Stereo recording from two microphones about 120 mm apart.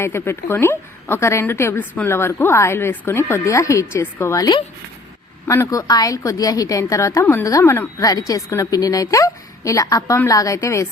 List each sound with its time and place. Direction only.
0.0 s a woman's voice: 20° left (ahead or behind)